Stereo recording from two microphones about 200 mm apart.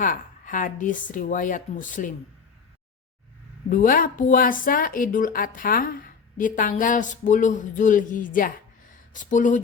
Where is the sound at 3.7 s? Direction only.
45° left (ahead or behind).